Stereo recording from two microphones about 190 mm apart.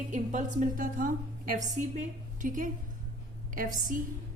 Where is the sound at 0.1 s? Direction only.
40° right (ahead or behind).